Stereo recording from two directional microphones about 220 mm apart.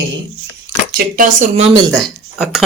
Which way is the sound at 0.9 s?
40° right (ahead or behind).